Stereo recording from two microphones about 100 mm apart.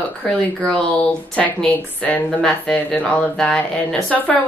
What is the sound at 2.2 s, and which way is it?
A woman's voice, 5° left (ahead or behind).